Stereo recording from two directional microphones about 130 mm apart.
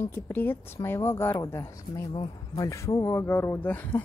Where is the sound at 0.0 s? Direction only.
15° left (ahead or behind).